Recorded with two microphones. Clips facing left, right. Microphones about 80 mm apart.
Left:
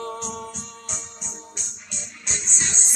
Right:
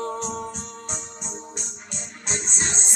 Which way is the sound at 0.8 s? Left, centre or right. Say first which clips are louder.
Right 3 dB; right.